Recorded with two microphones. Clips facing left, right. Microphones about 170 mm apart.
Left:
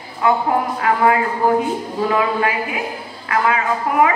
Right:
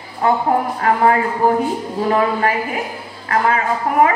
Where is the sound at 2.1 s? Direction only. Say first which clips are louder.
Right 3 dB; 40° right (ahead or behind).